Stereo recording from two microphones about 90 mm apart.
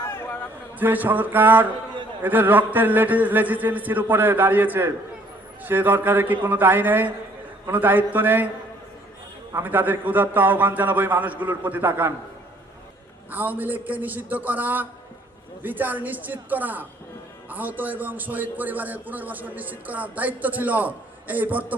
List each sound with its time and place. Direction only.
0.0 s a sound: 25° left (ahead or behind)
0.8 s a man's voice: 20° right (ahead or behind)
9.5 s a man's voice: 25° right (ahead or behind)
13.3 s a man's voice: 20° right (ahead or behind)